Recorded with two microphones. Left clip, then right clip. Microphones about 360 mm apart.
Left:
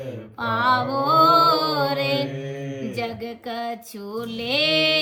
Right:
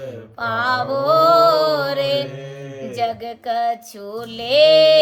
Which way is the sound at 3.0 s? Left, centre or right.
Right.